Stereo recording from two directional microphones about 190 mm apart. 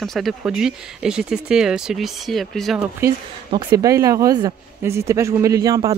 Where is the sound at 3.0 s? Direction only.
20° right (ahead or behind).